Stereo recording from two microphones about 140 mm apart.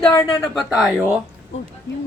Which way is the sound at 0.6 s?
5° right (ahead or behind).